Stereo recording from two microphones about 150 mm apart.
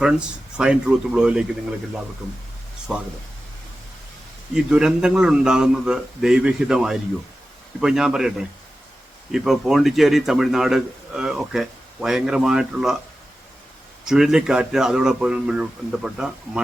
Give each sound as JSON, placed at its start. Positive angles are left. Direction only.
{"t": 0.0, "sound": "a man's voice", "side_deg": -5}
{"t": 2.9, "sound": "a man's voice", "side_deg": -5}
{"t": 4.5, "sound": "a man's voice", "side_deg": -5}
{"t": 14.0, "sound": "a man's voice", "side_deg": -5}